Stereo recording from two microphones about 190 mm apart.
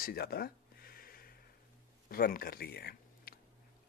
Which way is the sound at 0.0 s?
55° left (ahead or behind).